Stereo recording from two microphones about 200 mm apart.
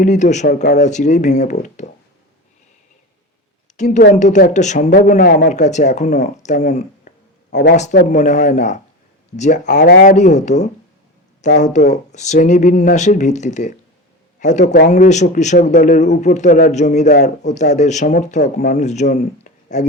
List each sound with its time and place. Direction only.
0.0 s speech: 35° left (ahead or behind)
1.6 s a sound: 35° left (ahead or behind)
3.8 s a woman's voice: 35° left (ahead or behind)
4.9 s a man's voice: 45° left (ahead or behind)
7.5 s speech: 55° left (ahead or behind)
7.8 s a man's voice: 35° left (ahead or behind)